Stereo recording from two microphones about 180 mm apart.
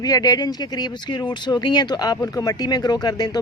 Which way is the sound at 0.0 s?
20° left (ahead or behind).